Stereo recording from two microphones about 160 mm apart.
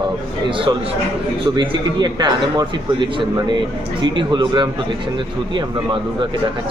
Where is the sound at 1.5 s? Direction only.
30° right (ahead or behind).